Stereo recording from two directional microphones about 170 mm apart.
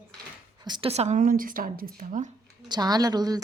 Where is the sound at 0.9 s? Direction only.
40° right (ahead or behind).